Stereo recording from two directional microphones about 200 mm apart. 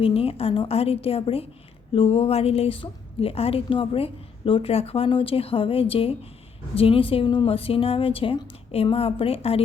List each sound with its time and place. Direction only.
0.0 s a woman's voice: 30° left (ahead or behind)